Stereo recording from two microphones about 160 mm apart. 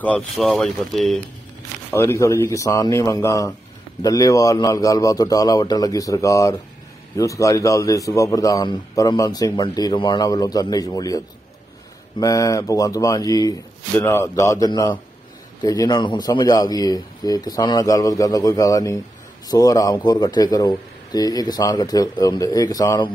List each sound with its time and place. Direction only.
0.0 s speech: 5° left (ahead or behind)
1.9 s a man's voice: 15° left (ahead or behind)